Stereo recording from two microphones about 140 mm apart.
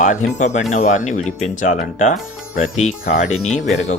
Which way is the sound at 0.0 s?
65° left (ahead or behind).